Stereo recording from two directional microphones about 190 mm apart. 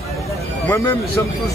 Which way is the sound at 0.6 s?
10° left (ahead or behind).